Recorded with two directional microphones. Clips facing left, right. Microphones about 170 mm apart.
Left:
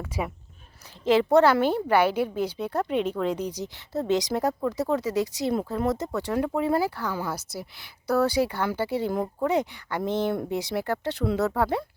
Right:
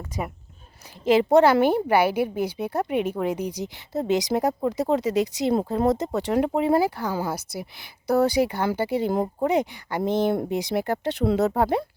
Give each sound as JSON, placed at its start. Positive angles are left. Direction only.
{"t": 0.2, "sound": "speech", "side_deg": 0}
{"t": 1.0, "sound": "a woman's voice", "side_deg": -15}